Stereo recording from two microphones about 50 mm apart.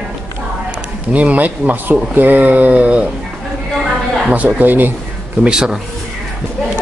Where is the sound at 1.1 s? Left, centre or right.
Right.